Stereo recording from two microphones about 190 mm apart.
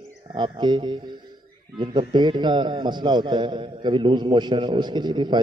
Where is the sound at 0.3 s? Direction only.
25° right (ahead or behind).